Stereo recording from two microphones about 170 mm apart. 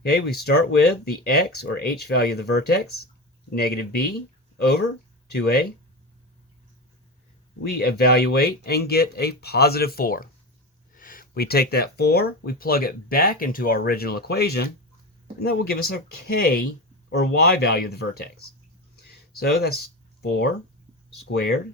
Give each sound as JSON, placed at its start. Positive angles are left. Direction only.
{"t": 0.0, "sound": "speech", "side_deg": 65}
{"t": 7.6, "sound": "speech", "side_deg": 65}
{"t": 19.0, "sound": "a sound", "side_deg": 65}
{"t": 20.2, "sound": "speech", "side_deg": 70}